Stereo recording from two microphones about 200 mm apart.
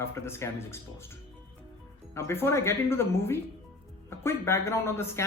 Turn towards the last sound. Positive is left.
turn(degrees=10)  # may be behind; listen again after turning